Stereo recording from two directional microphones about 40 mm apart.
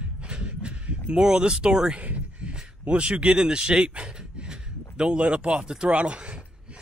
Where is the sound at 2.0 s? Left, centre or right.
Right.